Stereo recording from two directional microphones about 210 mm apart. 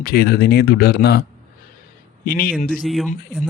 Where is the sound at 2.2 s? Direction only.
45° left (ahead or behind).